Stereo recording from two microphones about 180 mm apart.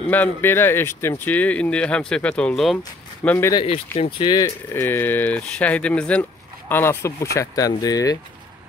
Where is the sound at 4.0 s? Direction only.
25° left (ahead or behind).